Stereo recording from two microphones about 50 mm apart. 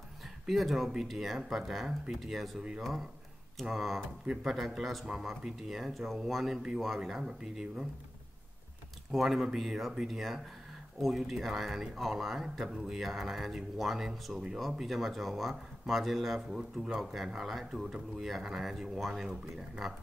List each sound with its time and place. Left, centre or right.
0.5 s speech: centre
3.6 s speech: centre
9.1 s speech: centre